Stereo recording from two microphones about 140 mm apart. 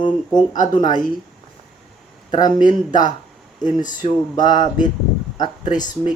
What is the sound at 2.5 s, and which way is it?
Speech, 65° left (ahead or behind).